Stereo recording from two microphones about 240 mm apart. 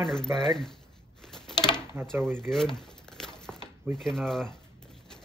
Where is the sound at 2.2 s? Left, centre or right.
Centre.